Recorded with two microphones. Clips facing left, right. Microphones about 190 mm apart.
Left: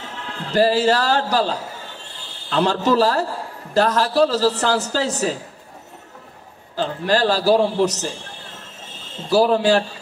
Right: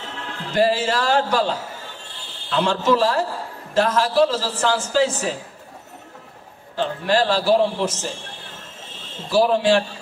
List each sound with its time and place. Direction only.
0.6 s a man's voice: 35° left (ahead or behind)
2.5 s a man's voice: 40° left (ahead or behind)
6.8 s a man's voice: 40° left (ahead or behind)
9.3 s a man's voice: 40° left (ahead or behind)